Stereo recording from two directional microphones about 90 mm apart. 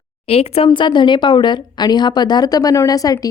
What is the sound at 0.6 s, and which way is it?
A woman's voice, 65° left (ahead or behind).